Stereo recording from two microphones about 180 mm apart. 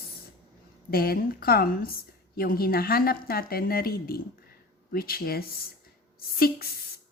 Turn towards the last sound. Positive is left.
turn(degrees=55)  # may be behind; listen again after turning